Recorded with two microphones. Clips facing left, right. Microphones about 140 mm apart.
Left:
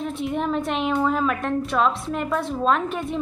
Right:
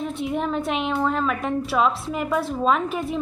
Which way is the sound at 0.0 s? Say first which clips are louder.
Even; centre (ahead or behind).